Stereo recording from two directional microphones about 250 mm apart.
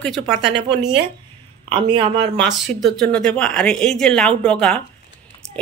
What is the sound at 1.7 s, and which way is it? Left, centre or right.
Speech, right.